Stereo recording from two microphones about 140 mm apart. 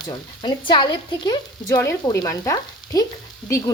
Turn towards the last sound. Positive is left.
turn(degrees=20)  # may be behind; listen again after turning